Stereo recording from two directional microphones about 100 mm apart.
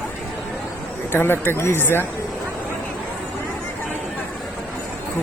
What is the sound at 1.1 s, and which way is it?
Speech, 25° left (ahead or behind).